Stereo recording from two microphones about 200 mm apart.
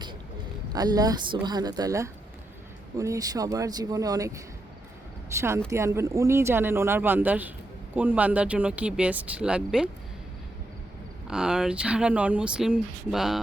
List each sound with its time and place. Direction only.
0.7 s speech: 20° right (ahead or behind)
11.3 s speech: 5° right (ahead or behind)